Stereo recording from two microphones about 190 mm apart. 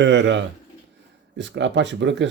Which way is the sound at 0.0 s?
70° right (ahead or behind).